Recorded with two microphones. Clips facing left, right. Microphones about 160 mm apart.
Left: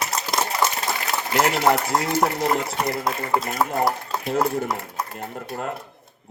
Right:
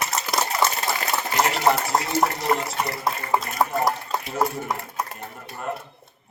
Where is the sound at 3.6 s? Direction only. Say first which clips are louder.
Right 1 dB; 15° right (ahead or behind).